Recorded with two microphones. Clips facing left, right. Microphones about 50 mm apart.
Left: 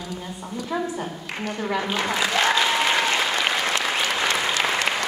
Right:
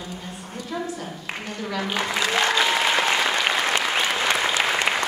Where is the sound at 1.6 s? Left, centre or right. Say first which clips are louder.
Left 3 dB; centre.